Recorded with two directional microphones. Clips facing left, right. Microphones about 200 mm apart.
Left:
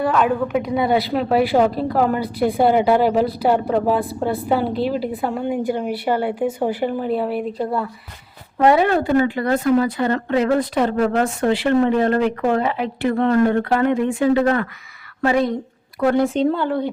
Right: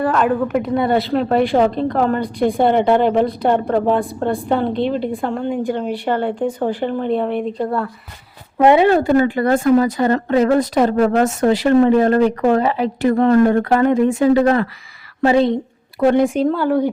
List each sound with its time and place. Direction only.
0.0 s a woman's voice: centre (ahead or behind)
8.5 s a woman's voice: 20° right (ahead or behind)
8.9 s a woman's voice: 45° right (ahead or behind); by 16.9 s 10° right (ahead or behind)